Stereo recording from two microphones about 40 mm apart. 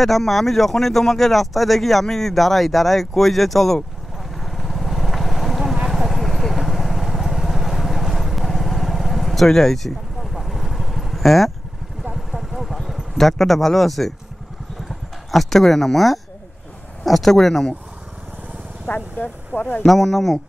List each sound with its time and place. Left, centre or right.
0.0 s speech: centre
5.9 s clip-clop: centre
6.6 s vehicle: centre
12.0 s a sound: centre
15.3 s speech: centre
18.9 s speech: left
19.9 s speech: centre